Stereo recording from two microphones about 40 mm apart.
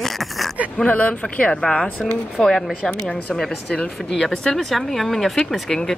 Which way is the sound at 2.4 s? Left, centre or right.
Centre.